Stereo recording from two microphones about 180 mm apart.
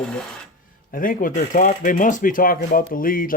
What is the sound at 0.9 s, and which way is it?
Speech, 50° left (ahead or behind).